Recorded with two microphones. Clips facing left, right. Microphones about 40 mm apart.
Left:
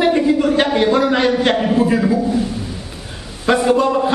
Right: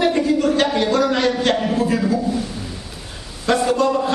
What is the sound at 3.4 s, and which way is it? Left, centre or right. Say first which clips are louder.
Speech: left 3 dB; centre.